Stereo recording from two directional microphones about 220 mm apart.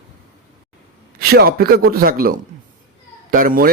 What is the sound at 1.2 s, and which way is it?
A man's voice, 45° right (ahead or behind).